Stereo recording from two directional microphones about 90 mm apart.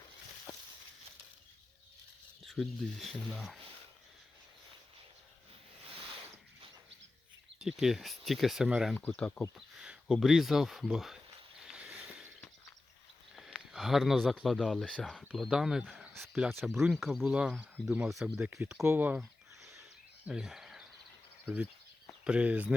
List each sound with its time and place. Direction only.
2.4 s speech: centre (ahead or behind)
7.6 s speech: 5° right (ahead or behind)
9.0 s speech: 10° left (ahead or behind)
9.6 s speech: 10° right (ahead or behind)
13.3 s sniff: centre (ahead or behind)
14.4 s speech: centre (ahead or behind)
18.9 s speech: 20° right (ahead or behind)
20.2 s cricket: 5° right (ahead or behind)
21.4 s speech: 15° right (ahead or behind)